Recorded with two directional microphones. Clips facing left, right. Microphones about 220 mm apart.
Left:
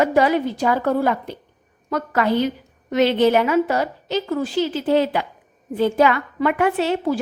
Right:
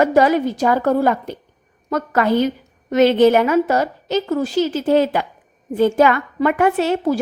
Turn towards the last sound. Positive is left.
turn(degrees=-45)  # may be behind; listen again after turning